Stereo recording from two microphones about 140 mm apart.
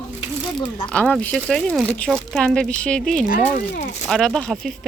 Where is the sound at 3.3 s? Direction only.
75° left (ahead or behind).